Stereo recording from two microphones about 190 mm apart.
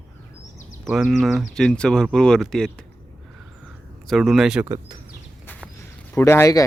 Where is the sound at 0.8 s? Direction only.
Centre (ahead or behind).